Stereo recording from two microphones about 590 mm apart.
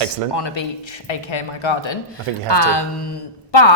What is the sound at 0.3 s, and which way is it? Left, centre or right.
A woman's voice, left.